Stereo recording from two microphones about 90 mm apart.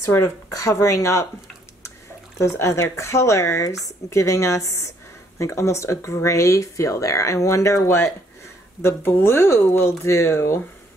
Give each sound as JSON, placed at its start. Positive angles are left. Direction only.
{"t": 0.0, "sound": "speech", "side_deg": 35}
{"t": 2.4, "sound": "speech", "side_deg": 30}